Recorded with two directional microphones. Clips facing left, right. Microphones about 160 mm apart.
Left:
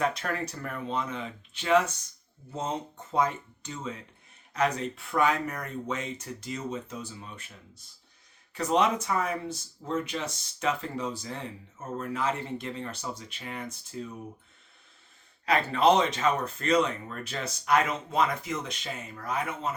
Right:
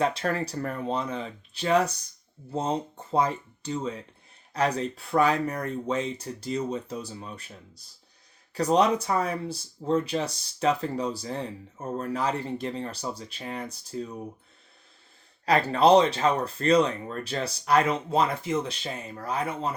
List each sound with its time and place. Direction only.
0.0 s speech: 30° right (ahead or behind)
15.4 s speech: 35° right (ahead or behind)